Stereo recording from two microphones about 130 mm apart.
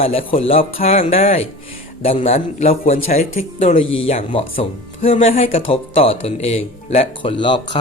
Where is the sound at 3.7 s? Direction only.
45° left (ahead or behind).